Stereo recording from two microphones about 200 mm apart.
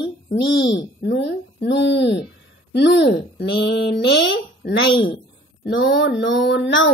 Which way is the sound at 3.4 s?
55° left (ahead or behind).